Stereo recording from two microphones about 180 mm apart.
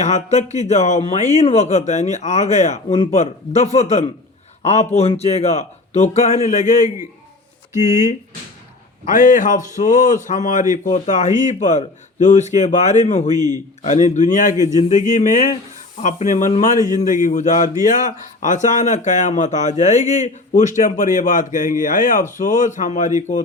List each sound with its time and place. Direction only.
0.0 s a man's voice: 40° left (ahead or behind)
9.0 s a man's voice: 45° left (ahead or behind)